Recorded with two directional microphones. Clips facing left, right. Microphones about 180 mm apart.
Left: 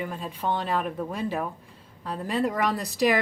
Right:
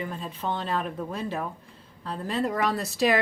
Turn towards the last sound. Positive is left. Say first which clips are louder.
# even
turn(degrees=15)  # may be behind; listen again after turning